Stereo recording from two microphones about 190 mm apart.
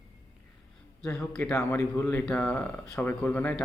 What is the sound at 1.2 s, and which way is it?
Speech, 5° left (ahead or behind).